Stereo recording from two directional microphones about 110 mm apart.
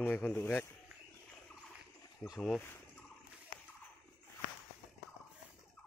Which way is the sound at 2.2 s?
5° right (ahead or behind).